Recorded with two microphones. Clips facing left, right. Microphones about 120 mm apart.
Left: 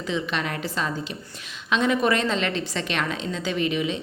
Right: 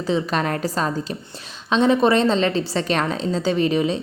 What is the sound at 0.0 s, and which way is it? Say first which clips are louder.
Speech: right 6 dB; 35° right (ahead or behind).